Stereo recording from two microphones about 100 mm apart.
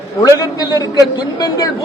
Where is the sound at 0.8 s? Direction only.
40° left (ahead or behind).